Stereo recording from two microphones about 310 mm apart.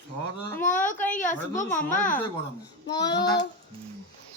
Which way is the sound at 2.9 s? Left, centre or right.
Centre.